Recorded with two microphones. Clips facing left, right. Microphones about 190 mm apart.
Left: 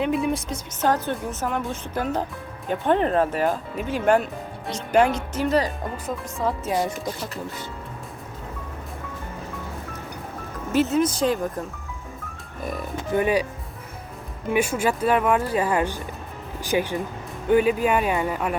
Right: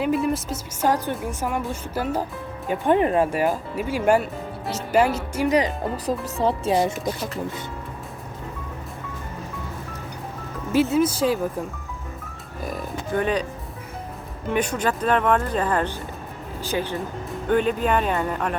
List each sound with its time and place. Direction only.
0.0 s a woman's voice: centre (ahead or behind)
6.1 s speech: 30° right (ahead or behind)
10.7 s a woman's voice: 10° right (ahead or behind)
13.1 s speech: 10° left (ahead or behind)
14.5 s speech: 10° left (ahead or behind)